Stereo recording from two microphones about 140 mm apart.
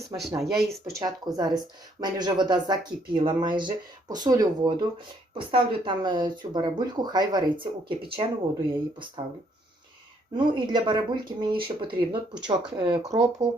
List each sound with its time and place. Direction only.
0.3 s speech: centre (ahead or behind)
0.9 s speech: 25° right (ahead or behind)
10.3 s speech: 35° right (ahead or behind)